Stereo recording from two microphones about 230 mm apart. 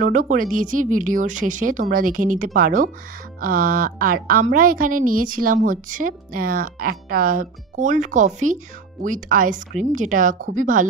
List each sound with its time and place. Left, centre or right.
0.0 s a woman's voice: right